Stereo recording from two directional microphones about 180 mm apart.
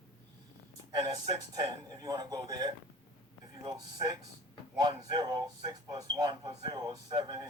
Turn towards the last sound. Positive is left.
turn(degrees=-25)  # may be behind; listen again after turning